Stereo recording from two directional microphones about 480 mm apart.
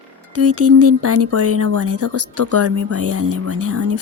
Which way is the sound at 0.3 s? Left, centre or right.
Right.